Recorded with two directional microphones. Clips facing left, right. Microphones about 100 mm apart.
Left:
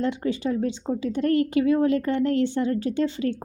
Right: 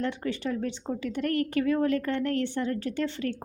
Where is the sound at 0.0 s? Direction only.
15° left (ahead or behind).